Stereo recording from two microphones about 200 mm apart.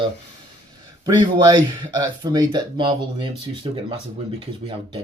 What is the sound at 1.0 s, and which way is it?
Speech, 20° right (ahead or behind).